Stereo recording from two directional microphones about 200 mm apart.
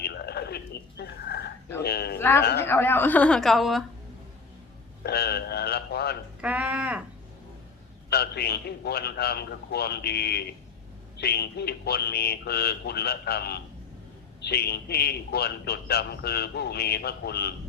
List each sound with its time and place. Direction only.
0.0 s a sound: 55° left (ahead or behind)
1.8 s a man's voice: 55° left (ahead or behind)
2.1 s a woman's voice: 10° left (ahead or behind)
2.4 s a man's voice: 55° left (ahead or behind)
2.6 s a woman's voice: 10° left (ahead or behind)
5.0 s speech: 55° left (ahead or behind)
6.4 s speech: 5° right (ahead or behind)
8.1 s a man's voice: 55° left (ahead or behind)